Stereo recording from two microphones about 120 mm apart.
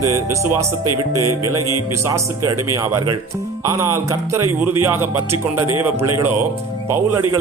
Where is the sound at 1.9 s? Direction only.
25° right (ahead or behind).